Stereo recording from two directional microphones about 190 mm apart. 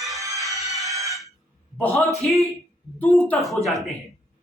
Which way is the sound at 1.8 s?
10° left (ahead or behind).